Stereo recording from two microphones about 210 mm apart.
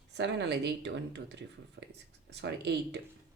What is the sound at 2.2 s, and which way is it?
Speech, 55° right (ahead or behind).